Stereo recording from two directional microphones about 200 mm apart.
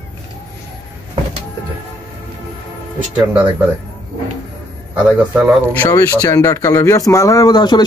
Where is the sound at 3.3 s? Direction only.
10° right (ahead or behind).